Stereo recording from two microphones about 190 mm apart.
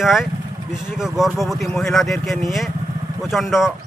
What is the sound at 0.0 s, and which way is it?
A man's voice, centre (ahead or behind).